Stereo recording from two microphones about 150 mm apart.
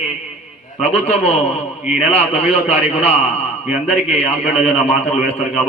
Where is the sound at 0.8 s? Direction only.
45° left (ahead or behind).